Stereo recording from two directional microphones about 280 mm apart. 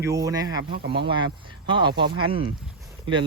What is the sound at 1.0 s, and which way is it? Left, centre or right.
Speech, centre.